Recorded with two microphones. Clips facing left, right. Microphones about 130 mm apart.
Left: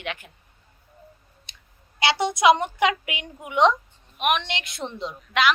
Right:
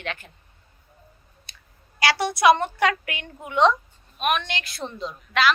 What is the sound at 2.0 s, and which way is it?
A woman's voice, 20° left (ahead or behind).